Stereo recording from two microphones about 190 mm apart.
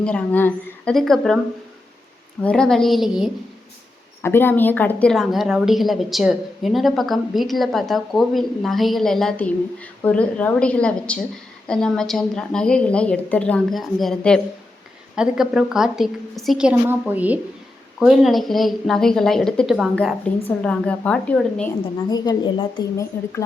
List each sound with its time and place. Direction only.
0.0 s a woman's voice: 5° left (ahead or behind)
2.4 s a woman's voice: 5° left (ahead or behind)
4.2 s a woman's voice: 10° left (ahead or behind)
22.1 s a woman's voice: 20° left (ahead or behind)